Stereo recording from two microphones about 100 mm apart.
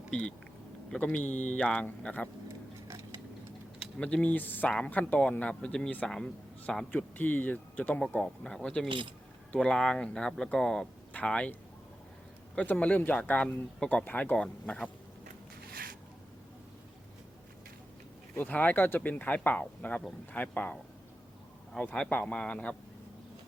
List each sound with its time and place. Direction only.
0.1 s speech: 10° left (ahead or behind)
2.8 s tick-tock: 30° right (ahead or behind)
3.9 s speech: 10° left (ahead or behind)
6.9 s speech: 20° left (ahead or behind)
8.9 s speech: 55° right (ahead or behind)
9.5 s speech: 10° left (ahead or behind)
12.5 s speech: 15° left (ahead or behind)
18.3 s speech: 15° left (ahead or behind)